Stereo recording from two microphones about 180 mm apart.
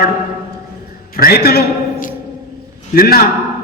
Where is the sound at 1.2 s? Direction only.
60° left (ahead or behind).